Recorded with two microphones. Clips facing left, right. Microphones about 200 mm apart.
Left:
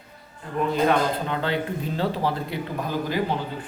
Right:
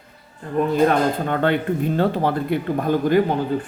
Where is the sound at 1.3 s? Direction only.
55° right (ahead or behind).